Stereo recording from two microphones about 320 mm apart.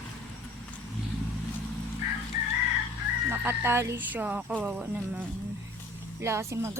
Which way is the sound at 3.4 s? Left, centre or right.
Centre.